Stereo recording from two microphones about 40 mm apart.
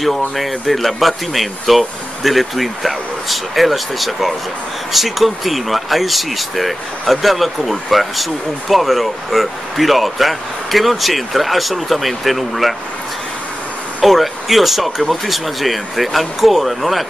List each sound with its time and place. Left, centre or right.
0.0 s speech: centre
14.0 s speech: centre